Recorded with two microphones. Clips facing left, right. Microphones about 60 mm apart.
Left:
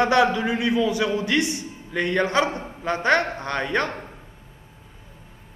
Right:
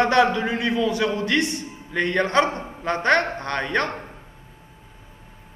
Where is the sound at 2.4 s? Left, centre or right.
Right.